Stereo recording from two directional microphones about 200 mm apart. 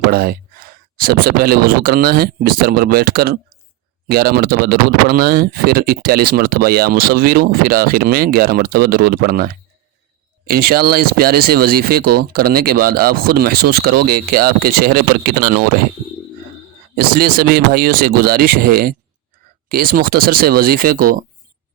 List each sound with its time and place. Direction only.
0.1 s speech: 50° right (ahead or behind)
16.9 s speech: 50° right (ahead or behind)